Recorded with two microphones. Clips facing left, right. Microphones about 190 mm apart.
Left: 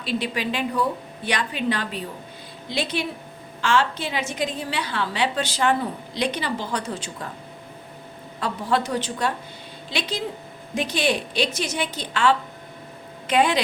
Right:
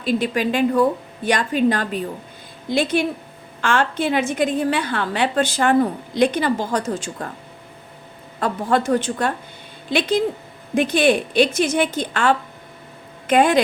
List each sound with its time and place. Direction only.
0.0 s a woman's voice: 45° right (ahead or behind)
8.4 s a woman's voice: 50° right (ahead or behind)